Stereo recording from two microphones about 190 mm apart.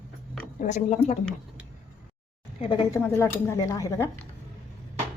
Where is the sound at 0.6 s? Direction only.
40° left (ahead or behind).